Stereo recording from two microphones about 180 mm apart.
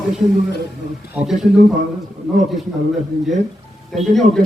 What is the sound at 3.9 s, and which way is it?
Speech, centre (ahead or behind).